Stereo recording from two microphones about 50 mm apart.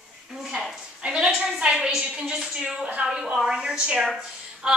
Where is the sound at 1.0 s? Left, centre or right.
Right.